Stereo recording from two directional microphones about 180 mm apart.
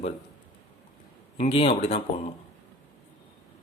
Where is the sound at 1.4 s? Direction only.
30° left (ahead or behind).